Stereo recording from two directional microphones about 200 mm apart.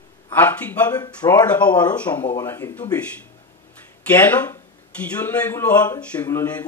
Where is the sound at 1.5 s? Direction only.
5° left (ahead or behind).